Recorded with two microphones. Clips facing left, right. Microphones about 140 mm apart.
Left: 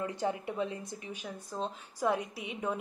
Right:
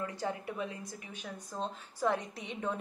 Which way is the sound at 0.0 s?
20° left (ahead or behind).